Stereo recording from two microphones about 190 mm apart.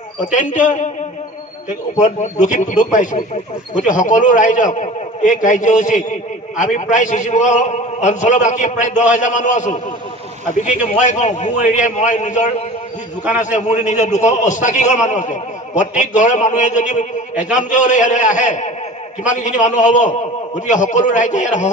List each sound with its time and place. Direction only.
0.2 s a man's voice: 40° left (ahead or behind)
2.0 s a man's voice: 40° left (ahead or behind)